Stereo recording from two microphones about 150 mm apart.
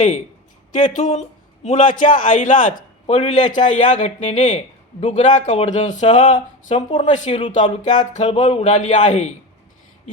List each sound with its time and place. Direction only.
0.8 s a man's voice: 55° left (ahead or behind)
3.1 s a man's voice: 50° left (ahead or behind)